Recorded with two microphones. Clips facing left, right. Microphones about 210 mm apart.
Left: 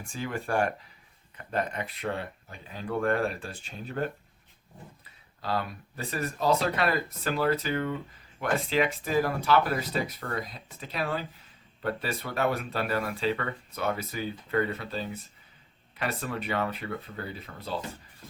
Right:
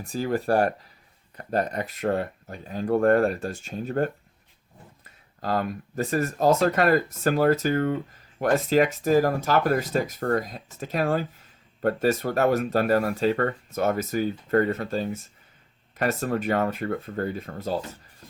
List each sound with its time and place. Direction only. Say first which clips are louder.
0.0 s speech: right 8 dB; 40° right (ahead or behind)
5.4 s speech: right 5 dB; 45° right (ahead or behind)